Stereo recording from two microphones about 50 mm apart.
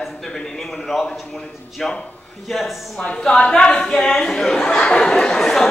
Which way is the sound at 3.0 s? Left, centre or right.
Centre.